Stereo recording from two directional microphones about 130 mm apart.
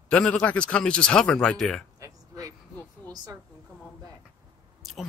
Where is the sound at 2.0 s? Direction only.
25° right (ahead or behind).